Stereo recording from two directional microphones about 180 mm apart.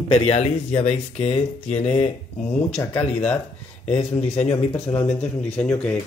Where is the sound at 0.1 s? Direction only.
35° left (ahead or behind).